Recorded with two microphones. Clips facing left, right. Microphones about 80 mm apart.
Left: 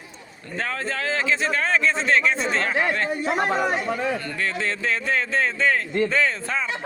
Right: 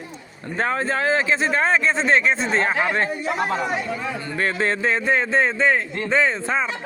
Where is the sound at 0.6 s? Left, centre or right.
Right.